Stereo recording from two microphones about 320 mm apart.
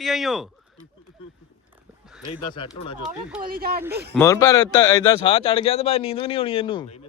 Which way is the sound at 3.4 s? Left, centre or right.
Right.